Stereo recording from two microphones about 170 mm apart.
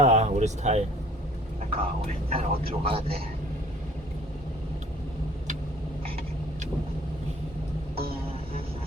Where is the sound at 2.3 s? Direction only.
35° right (ahead or behind).